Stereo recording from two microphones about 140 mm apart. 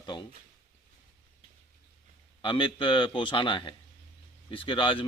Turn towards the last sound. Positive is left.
turn(degrees=35)  # may be behind; listen again after turning